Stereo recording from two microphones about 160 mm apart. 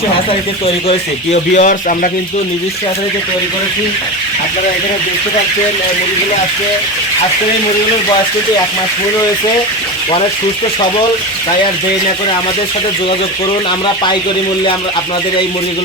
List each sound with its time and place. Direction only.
0.9 s speech: 45° left (ahead or behind)